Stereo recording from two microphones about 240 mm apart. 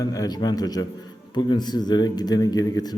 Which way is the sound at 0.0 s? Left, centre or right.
Centre.